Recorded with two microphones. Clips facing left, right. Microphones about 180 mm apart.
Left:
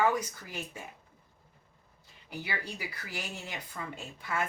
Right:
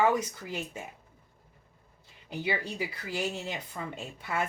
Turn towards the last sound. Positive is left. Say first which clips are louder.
# right 2 dB
turn(degrees=-25)  # may be behind; listen again after turning